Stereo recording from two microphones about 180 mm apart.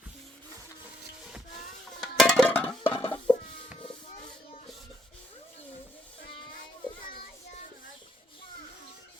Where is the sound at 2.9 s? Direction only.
30° left (ahead or behind).